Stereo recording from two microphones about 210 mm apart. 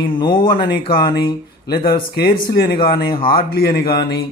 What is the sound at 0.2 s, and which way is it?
Speech, 20° left (ahead or behind).